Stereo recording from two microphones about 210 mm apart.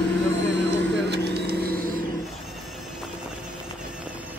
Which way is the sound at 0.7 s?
50° right (ahead or behind).